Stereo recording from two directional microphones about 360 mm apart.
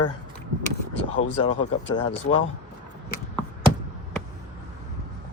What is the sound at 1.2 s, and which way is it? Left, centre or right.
Speech, left.